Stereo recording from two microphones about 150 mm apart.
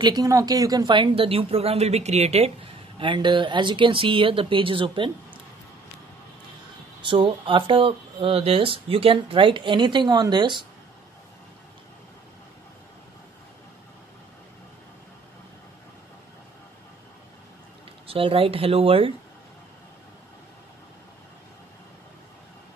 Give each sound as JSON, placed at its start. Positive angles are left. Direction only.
{"t": 0.0, "sound": "speech", "side_deg": -25}
{"t": 7.0, "sound": "speech", "side_deg": -35}
{"t": 18.0, "sound": "speech", "side_deg": -40}